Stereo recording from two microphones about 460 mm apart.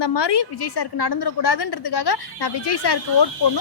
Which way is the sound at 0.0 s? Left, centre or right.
Left.